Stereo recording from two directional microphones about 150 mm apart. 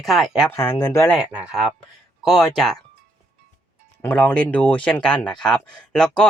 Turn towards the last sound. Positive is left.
turn(degrees=5)  # may be behind; listen again after turning